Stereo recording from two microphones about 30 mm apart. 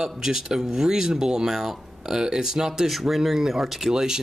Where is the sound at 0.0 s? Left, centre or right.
Centre.